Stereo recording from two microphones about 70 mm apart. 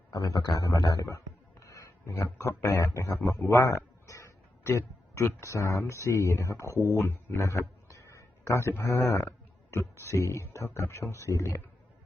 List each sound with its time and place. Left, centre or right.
0.1 s a man's voice: left
0.4 s a man's voice: left
0.7 s a man's voice: left
3.8 s a sound: left
5.4 s speech: left